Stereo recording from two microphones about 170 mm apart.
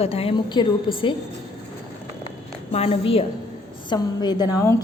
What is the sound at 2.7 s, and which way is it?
A woman's voice, 35° left (ahead or behind).